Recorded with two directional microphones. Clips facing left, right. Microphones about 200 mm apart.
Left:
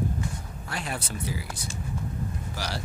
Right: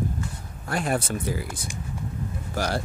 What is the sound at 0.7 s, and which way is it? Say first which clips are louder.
Speech: right 8 dB; 50° right (ahead or behind).